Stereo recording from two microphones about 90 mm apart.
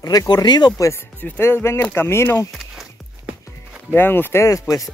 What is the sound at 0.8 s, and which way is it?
Speech, 30° left (ahead or behind).